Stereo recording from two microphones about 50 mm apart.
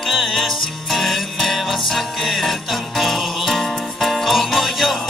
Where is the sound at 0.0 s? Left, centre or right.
Centre.